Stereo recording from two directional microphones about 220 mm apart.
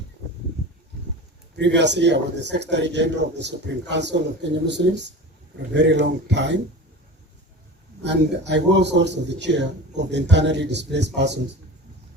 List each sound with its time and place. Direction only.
1.5 s a man's voice: 50° right (ahead or behind)
8.0 s a man's voice: 50° right (ahead or behind)